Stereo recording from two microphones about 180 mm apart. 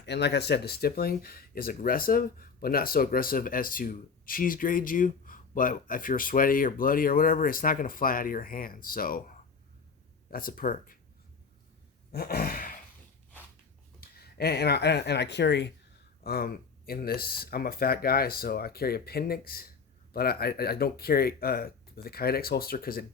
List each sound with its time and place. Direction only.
0.0 s speech: 70° left (ahead or behind); by 9.2 s 55° left (ahead or behind)
10.3 s speech: 50° left (ahead or behind)
12.1 s a sound: 60° left (ahead or behind)
14.2 s speech: 60° left (ahead or behind)
16.2 s speech: 60° left (ahead or behind)